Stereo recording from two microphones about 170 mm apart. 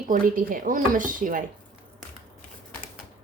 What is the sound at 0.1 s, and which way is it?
Speech, 55° right (ahead or behind).